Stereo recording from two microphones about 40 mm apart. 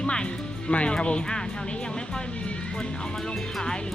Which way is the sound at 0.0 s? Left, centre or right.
Left.